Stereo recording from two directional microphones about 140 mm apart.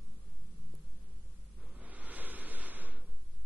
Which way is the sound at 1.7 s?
10° right (ahead or behind).